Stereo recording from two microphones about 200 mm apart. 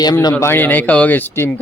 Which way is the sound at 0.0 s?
20° left (ahead or behind).